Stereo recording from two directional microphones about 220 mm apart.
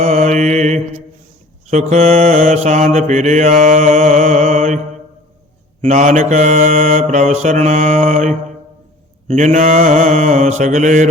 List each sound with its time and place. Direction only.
0.0 s mantra: 30° right (ahead or behind)
5.8 s mantra: 30° right (ahead or behind)